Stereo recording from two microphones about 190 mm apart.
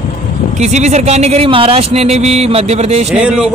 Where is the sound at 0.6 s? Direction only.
35° right (ahead or behind).